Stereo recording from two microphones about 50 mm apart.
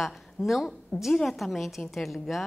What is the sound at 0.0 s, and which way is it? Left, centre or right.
Speech, centre.